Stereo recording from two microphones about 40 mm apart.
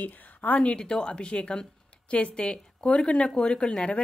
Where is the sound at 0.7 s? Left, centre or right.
Centre.